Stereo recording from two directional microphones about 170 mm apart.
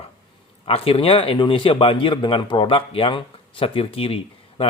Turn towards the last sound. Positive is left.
turn(degrees=35)  # may be behind; listen again after turning